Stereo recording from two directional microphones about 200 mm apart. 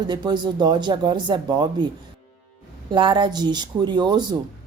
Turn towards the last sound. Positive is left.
turn(degrees=-20)  # may be behind; listen again after turning